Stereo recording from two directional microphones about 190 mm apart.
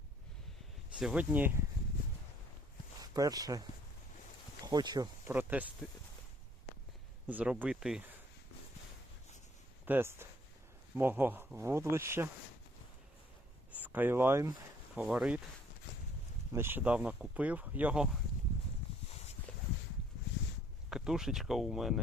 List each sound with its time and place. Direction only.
0.9 s speech: 5° right (ahead or behind)
3.0 s speech: 20° right (ahead or behind)
5.3 s speech: 10° right (ahead or behind)
7.3 s speech: 5° right (ahead or behind)
9.8 s speech: 10° right (ahead or behind)
13.7 s speech: 10° right (ahead or behind)
16.5 s speech: 10° right (ahead or behind)
20.9 s speech: 5° right (ahead or behind)